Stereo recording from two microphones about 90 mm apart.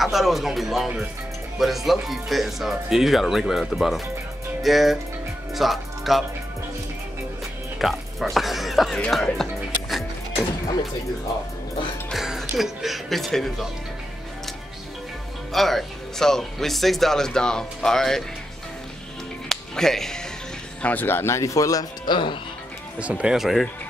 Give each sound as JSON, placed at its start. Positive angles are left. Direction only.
{"t": 0.0, "sound": "speech", "side_deg": 0}
{"t": 7.8, "sound": "speech", "side_deg": 0}
{"t": 9.2, "sound": "music", "side_deg": 0}
{"t": 12.1, "sound": "speech", "side_deg": 0}
{"t": 15.5, "sound": "speech", "side_deg": 0}
{"t": 19.5, "sound": "speech", "side_deg": 5}
{"t": 20.8, "sound": "speech", "side_deg": 20}
{"t": 22.0, "sound": "speech", "side_deg": 65}
{"t": 22.9, "sound": "speech", "side_deg": -15}